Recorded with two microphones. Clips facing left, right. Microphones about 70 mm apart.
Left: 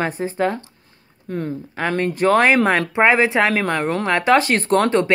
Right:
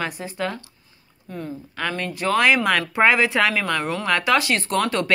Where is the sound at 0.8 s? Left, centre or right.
Left.